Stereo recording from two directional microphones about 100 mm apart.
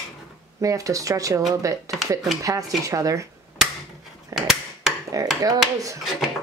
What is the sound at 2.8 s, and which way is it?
Speech, 35° right (ahead or behind).